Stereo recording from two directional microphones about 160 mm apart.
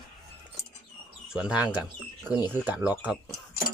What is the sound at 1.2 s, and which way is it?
Speech, 5° right (ahead or behind).